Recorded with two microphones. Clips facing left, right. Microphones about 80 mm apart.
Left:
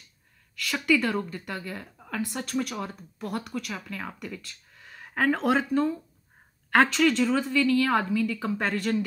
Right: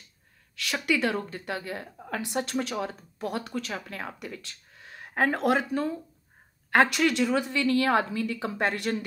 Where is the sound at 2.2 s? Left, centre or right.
Right.